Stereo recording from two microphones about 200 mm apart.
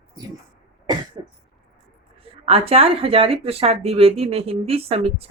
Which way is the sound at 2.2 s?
30° right (ahead or behind).